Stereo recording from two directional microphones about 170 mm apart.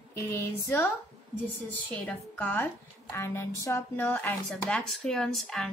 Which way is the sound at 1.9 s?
10° left (ahead or behind).